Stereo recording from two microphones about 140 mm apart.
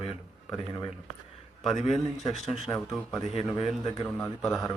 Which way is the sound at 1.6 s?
Centre (ahead or behind).